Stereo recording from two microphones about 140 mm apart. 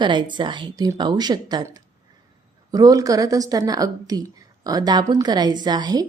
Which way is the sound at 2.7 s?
25° right (ahead or behind).